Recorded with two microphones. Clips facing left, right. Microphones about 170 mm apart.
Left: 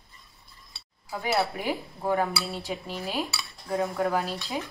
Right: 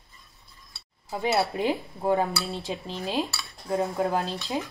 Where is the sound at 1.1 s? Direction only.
20° right (ahead or behind).